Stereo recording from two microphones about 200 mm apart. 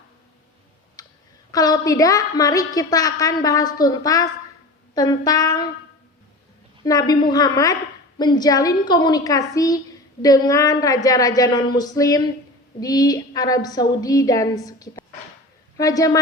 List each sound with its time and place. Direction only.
1.0 s clicking: 20° left (ahead or behind)
1.5 s a woman's voice: 20° left (ahead or behind)
6.8 s a woman's voice: 20° left (ahead or behind)